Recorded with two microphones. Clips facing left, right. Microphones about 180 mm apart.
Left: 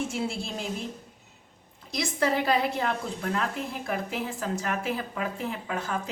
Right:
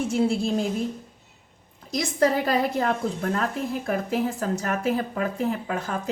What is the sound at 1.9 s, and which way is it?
A woman's voice, 40° right (ahead or behind).